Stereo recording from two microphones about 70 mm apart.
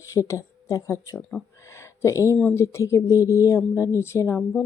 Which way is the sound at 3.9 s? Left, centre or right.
Left.